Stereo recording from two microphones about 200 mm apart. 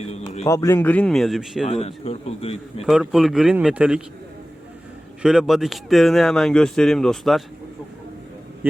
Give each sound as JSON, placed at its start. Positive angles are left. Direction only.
{"t": 0.0, "sound": "a man's voice", "side_deg": 30}
{"t": 0.4, "sound": "a man's voice", "side_deg": 15}
{"t": 1.6, "sound": "a man's voice", "side_deg": 30}
{"t": 2.8, "sound": "speech", "side_deg": 0}
{"t": 5.2, "sound": "speech", "side_deg": -5}